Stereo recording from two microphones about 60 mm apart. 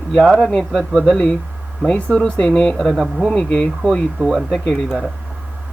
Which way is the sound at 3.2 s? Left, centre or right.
Centre.